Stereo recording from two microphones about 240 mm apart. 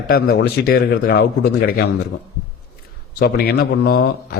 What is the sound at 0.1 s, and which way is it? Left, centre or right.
Speech, left.